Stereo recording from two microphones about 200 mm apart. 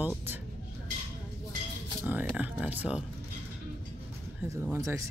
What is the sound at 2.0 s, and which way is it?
Speech, 10° right (ahead or behind).